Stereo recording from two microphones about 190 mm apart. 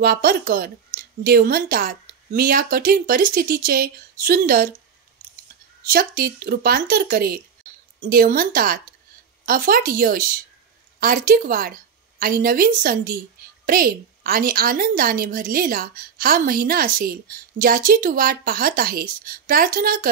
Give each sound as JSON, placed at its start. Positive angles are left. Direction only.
{"t": 0.0, "sound": "a woman's voice", "side_deg": -50}
{"t": 5.9, "sound": "a woman's voice", "side_deg": -50}